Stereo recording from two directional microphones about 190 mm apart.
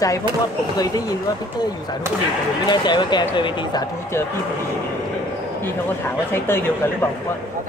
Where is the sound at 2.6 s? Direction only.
25° left (ahead or behind).